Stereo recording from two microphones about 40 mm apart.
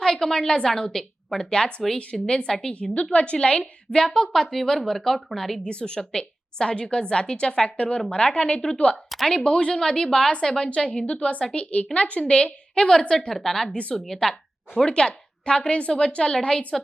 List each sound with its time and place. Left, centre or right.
0.0 s a sound: centre
0.8 s a woman's voice: centre
1.5 s a woman's voice: left
3.9 s speech: centre
5.6 s a woman's voice: left
10.8 s a woman's voice: left
12.9 s speech: centre
14.8 s a woman's voice: left